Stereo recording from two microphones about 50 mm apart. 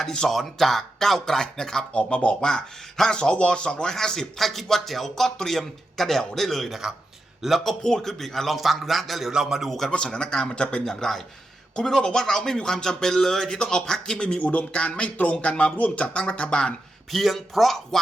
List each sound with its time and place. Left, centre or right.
0.0 s speech: centre
0.3 s speech: centre
7.6 s a man's voice: centre
9.3 s speech: centre
9.6 s speech: centre
9.9 s speech: centre
17.1 s a man's voice: centre